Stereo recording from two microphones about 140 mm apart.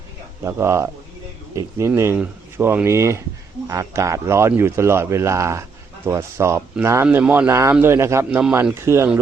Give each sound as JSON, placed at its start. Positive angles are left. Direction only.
{"t": 0.4, "sound": "speech", "side_deg": -20}